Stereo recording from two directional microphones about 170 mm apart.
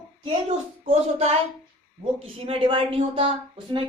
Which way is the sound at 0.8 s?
40° right (ahead or behind).